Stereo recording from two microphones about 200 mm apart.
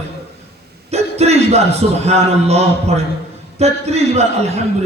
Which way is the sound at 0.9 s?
30° right (ahead or behind).